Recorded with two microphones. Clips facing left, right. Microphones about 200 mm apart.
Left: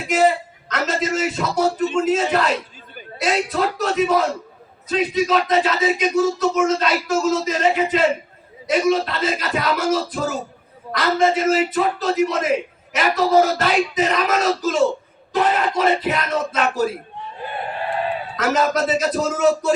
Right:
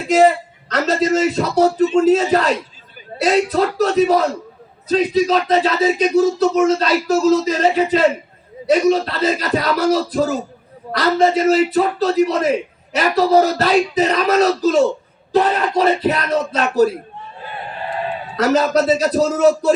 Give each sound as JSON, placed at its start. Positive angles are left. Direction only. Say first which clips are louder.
{"t": 0.7, "sound": "speech", "louder": "right 6 dB", "side_deg": -35}
{"t": 18.3, "sound": "speech", "louder": "right 5 dB", "side_deg": -35}